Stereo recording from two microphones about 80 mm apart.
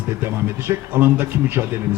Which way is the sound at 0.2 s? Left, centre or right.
Right.